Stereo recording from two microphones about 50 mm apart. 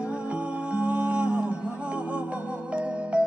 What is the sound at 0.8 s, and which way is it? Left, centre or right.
Music, right.